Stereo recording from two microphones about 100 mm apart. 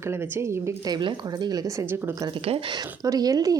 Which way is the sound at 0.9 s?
45° right (ahead or behind).